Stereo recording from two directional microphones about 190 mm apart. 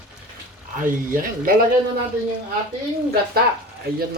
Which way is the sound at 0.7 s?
45° right (ahead or behind).